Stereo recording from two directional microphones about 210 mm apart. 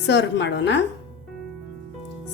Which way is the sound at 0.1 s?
55° left (ahead or behind).